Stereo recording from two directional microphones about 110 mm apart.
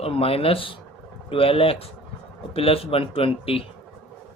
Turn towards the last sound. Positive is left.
turn(degrees=60)  # may be behind; listen again after turning